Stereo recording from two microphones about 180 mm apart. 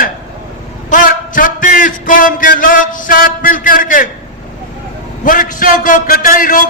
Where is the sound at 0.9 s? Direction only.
45° left (ahead or behind).